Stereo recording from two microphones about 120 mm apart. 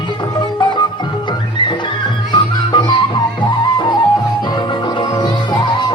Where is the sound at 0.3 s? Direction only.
40° left (ahead or behind).